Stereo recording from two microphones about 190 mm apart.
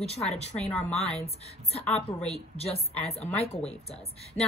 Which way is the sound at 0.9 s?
30° left (ahead or behind).